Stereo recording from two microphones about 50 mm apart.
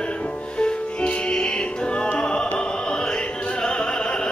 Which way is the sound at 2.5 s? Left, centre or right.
Centre.